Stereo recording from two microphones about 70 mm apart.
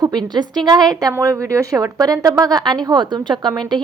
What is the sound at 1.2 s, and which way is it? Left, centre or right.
A woman's voice, right.